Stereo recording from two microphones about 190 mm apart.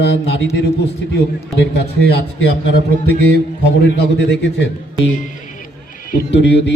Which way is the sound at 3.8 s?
70° left (ahead or behind).